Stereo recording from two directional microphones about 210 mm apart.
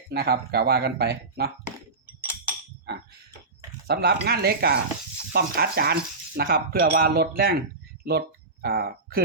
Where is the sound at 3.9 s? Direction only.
50° right (ahead or behind).